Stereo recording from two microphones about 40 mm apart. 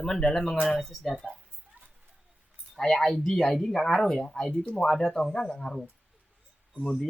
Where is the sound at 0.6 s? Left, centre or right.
Centre.